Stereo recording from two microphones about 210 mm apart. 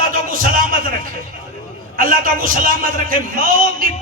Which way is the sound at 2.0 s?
40° right (ahead or behind).